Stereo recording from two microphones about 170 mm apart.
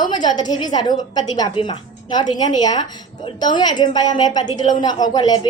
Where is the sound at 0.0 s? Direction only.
25° left (ahead or behind).